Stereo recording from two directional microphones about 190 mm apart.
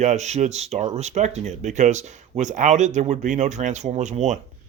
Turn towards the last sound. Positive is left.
turn(degrees=-40)  # may be behind; listen again after turning